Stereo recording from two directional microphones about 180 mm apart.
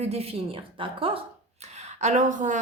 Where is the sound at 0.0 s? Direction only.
35° right (ahead or behind).